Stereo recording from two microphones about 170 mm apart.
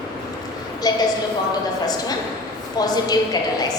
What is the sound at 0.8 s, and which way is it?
Speech, 25° left (ahead or behind).